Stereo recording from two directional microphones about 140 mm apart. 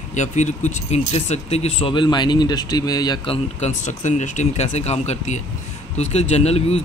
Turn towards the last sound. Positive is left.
turn(degrees=50)  # may be behind; listen again after turning